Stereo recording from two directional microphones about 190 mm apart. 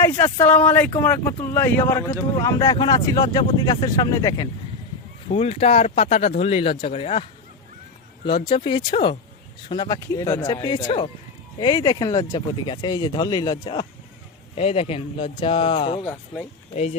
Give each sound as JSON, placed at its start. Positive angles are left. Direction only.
{"t": 0.0, "sound": "speech", "side_deg": 10}
{"t": 5.3, "sound": "speech", "side_deg": 30}
{"t": 8.4, "sound": "speech", "side_deg": 25}
{"t": 16.0, "sound": "speech", "side_deg": 5}